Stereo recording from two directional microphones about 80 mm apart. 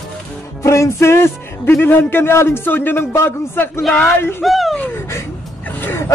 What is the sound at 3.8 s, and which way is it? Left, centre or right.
Speech, centre.